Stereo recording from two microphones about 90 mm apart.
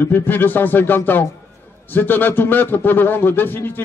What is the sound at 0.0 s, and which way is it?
A man's voice, 20° left (ahead or behind).